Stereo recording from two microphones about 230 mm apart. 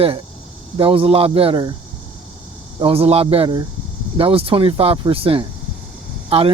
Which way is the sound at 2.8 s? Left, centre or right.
Right.